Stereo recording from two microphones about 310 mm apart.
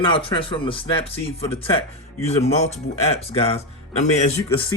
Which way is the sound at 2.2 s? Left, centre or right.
Left.